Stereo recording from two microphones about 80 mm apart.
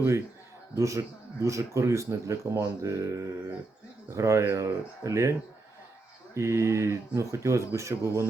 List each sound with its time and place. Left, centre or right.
0.8 s speech: right
6.3 s speech: right